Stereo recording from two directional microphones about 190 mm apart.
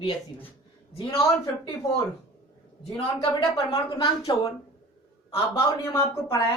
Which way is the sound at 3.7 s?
25° left (ahead or behind).